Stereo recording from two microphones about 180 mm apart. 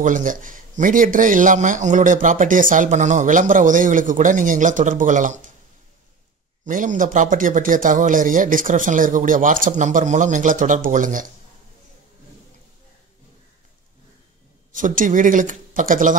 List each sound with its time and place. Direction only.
0.0 s a man's voice: 45° right (ahead or behind)
6.6 s a man's voice: 45° right (ahead or behind)
14.7 s a man's voice: 45° right (ahead or behind)